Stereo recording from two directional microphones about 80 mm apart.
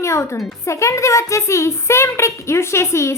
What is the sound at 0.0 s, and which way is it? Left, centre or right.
A woman's voice, left.